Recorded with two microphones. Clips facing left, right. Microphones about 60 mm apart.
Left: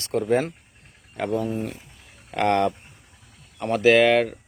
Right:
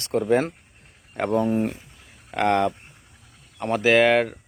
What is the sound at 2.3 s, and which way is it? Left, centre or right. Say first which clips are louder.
Speech: even; centre.